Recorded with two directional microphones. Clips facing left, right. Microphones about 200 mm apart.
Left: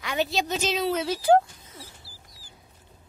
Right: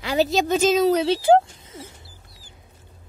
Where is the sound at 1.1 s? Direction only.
25° right (ahead or behind).